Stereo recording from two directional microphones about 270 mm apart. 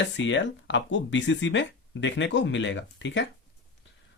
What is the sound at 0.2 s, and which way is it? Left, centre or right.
Speech, left.